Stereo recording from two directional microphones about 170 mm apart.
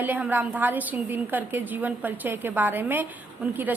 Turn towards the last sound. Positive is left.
turn(degrees=-10)  # may be behind; listen again after turning